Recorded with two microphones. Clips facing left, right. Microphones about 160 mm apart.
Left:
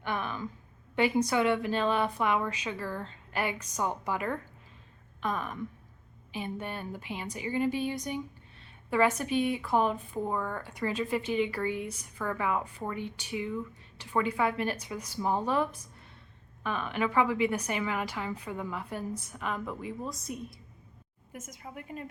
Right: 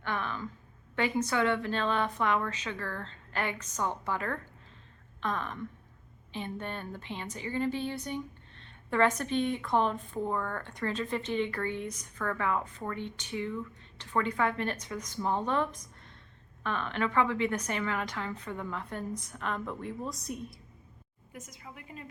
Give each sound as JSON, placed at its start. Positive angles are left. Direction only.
{"t": 0.0, "sound": "a woman's voice", "side_deg": 15}
{"t": 21.3, "sound": "a woman's voice", "side_deg": 45}